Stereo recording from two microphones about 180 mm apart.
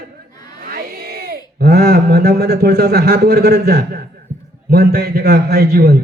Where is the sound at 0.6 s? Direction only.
55° right (ahead or behind).